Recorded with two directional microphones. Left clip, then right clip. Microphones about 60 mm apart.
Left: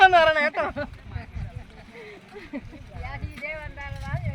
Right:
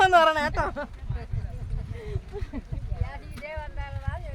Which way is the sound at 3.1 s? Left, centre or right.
Right.